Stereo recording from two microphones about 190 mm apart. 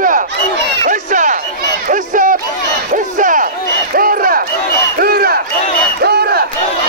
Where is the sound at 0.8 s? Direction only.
40° right (ahead or behind).